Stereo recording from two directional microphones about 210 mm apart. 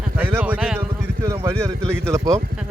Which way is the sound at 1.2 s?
15° right (ahead or behind).